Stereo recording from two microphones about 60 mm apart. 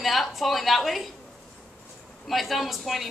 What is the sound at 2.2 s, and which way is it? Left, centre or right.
Speech, centre.